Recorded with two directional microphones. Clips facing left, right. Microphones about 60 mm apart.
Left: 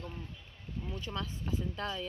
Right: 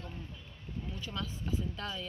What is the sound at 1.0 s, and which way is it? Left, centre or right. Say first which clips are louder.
Speech: right 1 dB; left.